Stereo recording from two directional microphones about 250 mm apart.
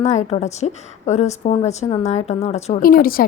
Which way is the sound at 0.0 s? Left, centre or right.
Left.